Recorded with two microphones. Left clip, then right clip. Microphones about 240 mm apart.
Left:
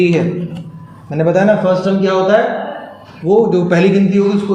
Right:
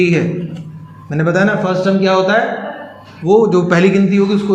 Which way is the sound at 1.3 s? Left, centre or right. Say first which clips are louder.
Left 3 dB; right.